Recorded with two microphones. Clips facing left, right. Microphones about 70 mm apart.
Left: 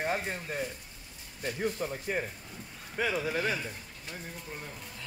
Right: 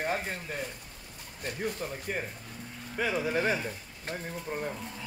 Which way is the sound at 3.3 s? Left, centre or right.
Right.